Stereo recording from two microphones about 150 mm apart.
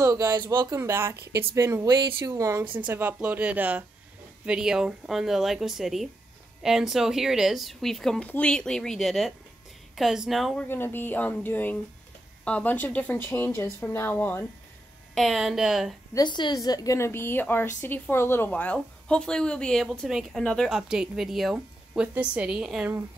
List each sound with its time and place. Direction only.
0.0 s speech: 20° right (ahead or behind)
2.6 s speech: 35° right (ahead or behind)
2.9 s speech: 10° right (ahead or behind)
10.7 s a woman's voice: 15° left (ahead or behind)
15.1 s speech: centre (ahead or behind)
16.1 s a woman's voice: 30° left (ahead or behind); by 22.9 s 5° right (ahead or behind)